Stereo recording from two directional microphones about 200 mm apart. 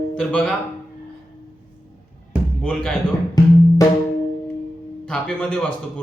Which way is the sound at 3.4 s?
20° left (ahead or behind).